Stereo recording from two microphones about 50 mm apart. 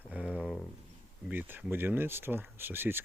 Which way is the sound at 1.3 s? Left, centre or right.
Right.